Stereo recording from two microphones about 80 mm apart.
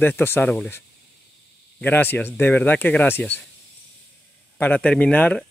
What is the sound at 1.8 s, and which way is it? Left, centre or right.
Speech, left.